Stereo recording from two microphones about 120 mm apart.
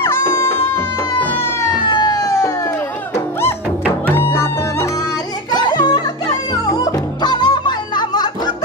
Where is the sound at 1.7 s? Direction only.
35° left (ahead or behind); by 4.9 s 20° left (ahead or behind).